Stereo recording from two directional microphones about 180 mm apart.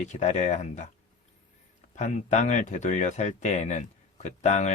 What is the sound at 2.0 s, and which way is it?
Speech, 40° left (ahead or behind).